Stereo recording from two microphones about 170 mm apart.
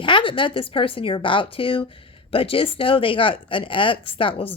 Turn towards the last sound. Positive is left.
turn(degrees=30)  # may be behind; listen again after turning